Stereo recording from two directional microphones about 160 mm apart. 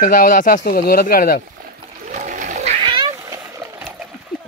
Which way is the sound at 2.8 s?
25° right (ahead or behind).